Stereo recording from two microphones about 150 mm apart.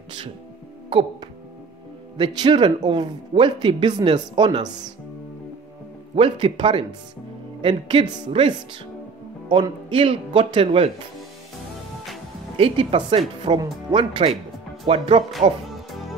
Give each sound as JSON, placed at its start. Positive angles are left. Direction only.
{"t": 0.8, "sound": "speech", "side_deg": -35}
{"t": 6.1, "sound": "speech", "side_deg": -35}
{"t": 12.5, "sound": "speech", "side_deg": -40}
{"t": 15.7, "sound": "music", "side_deg": 0}